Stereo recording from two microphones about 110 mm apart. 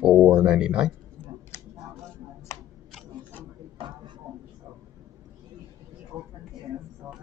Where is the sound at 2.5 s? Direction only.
25° left (ahead or behind).